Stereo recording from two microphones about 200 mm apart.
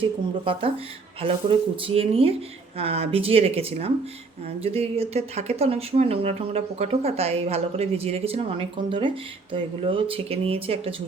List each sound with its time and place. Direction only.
1.2 s speech: 25° right (ahead or behind)